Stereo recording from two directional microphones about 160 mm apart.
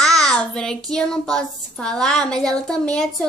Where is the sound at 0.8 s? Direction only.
5° left (ahead or behind).